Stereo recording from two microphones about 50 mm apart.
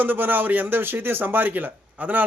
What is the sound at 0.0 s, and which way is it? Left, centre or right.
Speech, right.